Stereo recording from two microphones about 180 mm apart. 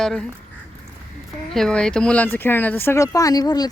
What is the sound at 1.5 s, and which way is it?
Speech, 5° left (ahead or behind).